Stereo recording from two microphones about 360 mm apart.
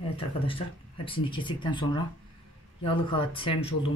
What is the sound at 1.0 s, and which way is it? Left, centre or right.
Speech, centre.